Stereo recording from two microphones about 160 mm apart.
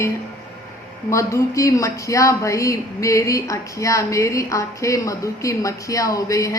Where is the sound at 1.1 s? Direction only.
20° left (ahead or behind).